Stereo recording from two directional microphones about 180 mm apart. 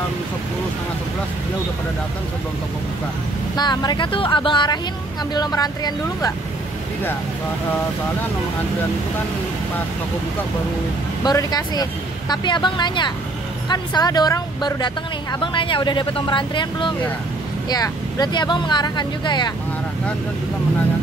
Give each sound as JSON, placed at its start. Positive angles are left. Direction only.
{"t": 3.5, "sound": "speech", "side_deg": 25}
{"t": 11.2, "sound": "speech", "side_deg": 20}